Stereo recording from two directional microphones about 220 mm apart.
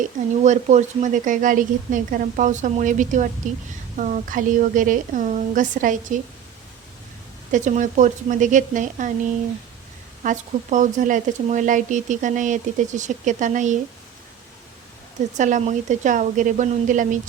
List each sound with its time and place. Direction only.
0.4 s speech: 35° right (ahead or behind)
7.5 s speech: 35° right (ahead or behind)
10.2 s speech: 35° right (ahead or behind)
15.4 s speech: 35° right (ahead or behind)